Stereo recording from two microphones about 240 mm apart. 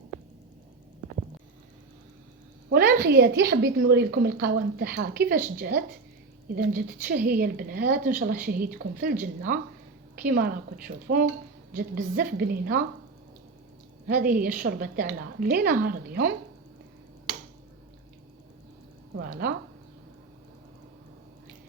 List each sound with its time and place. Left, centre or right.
2.7 s a woman's voice: right
14.1 s a woman's voice: right
19.3 s a woman's voice: right